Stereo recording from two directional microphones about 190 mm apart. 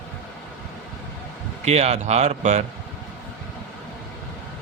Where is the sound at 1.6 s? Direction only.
35° right (ahead or behind).